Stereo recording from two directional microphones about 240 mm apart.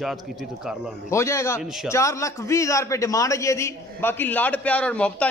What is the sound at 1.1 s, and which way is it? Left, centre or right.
A man's voice, centre.